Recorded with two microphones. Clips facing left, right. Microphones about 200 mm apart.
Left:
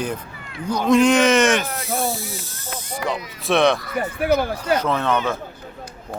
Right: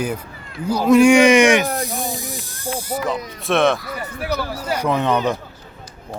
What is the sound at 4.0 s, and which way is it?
Speech, 55° left (ahead or behind).